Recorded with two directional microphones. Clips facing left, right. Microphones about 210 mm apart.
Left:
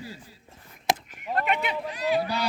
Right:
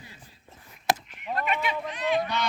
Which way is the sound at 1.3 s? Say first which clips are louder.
Left 2 dB; 60° left (ahead or behind).